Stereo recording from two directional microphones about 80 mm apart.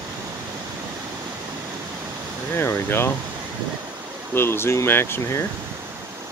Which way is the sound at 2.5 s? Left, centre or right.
Left.